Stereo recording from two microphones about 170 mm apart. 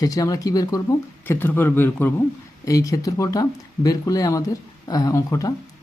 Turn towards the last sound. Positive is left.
turn(degrees=20)  # may be behind; listen again after turning